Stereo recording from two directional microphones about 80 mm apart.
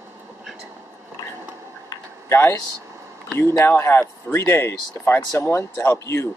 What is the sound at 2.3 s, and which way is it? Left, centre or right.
Speech, left.